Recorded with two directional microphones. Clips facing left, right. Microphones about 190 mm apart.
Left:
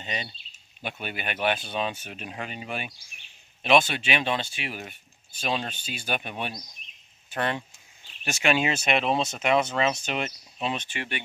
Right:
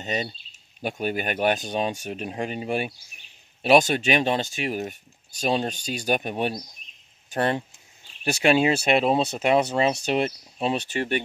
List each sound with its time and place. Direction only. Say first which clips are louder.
0.0 s speech: right 7 dB; 45° right (ahead or behind)